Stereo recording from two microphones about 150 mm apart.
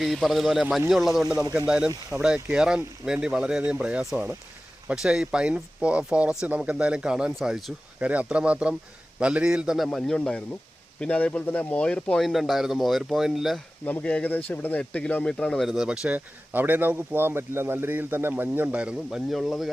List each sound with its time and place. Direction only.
0.0 s speech: centre (ahead or behind)
13.8 s speech: 10° left (ahead or behind)